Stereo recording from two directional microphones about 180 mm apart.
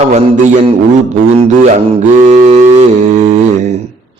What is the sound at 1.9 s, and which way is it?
Speech, 40° right (ahead or behind).